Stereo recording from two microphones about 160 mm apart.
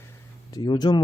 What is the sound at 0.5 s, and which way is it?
Speech, 25° left (ahead or behind).